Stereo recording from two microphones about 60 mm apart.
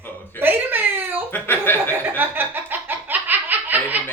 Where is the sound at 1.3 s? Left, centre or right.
Left.